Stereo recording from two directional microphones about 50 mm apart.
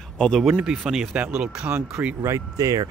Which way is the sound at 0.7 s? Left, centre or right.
Centre.